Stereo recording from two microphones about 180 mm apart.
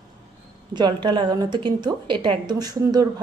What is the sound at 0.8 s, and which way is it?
A woman's voice, 25° right (ahead or behind).